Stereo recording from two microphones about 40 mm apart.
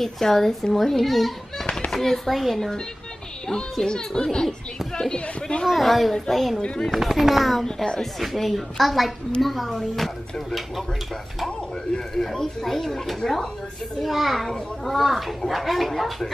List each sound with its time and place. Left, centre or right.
0.0 s a child's voice: centre
3.8 s speech: centre
5.7 s a child's voice: centre
7.6 s speech: centre
8.2 s a child's voice: centre
11.4 s a child's voice: centre
13.9 s a child's voice: centre